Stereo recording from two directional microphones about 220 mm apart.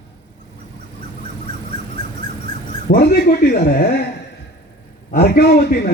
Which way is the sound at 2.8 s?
45° left (ahead or behind).